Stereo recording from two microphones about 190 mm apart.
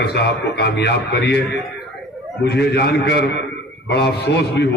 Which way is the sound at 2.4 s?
60° left (ahead or behind).